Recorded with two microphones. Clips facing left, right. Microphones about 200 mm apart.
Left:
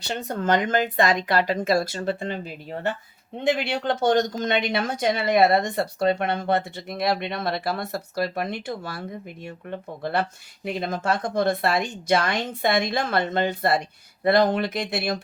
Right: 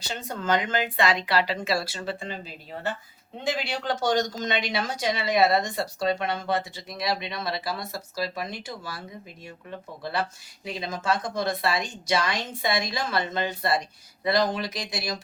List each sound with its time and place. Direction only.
0.1 s speech: 50° left (ahead or behind)